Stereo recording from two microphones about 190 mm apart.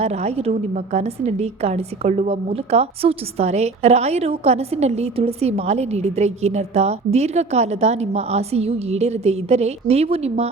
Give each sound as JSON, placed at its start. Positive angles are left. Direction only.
{"t": 0.0, "sound": "a woman's voice", "side_deg": -35}